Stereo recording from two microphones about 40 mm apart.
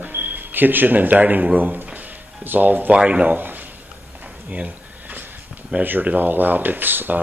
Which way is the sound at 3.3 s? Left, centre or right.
Right.